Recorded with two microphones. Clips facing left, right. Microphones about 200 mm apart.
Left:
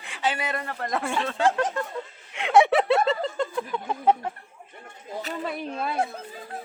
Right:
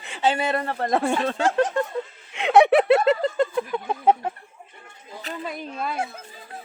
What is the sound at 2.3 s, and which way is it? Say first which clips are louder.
Snicker: right 3 dB; 25° right (ahead or behind).